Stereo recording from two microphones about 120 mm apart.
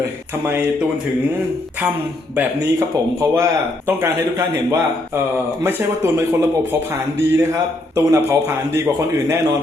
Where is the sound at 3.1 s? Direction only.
25° right (ahead or behind).